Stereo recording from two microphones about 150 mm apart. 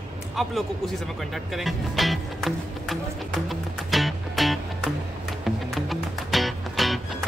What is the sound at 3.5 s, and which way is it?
Music, centre (ahead or behind).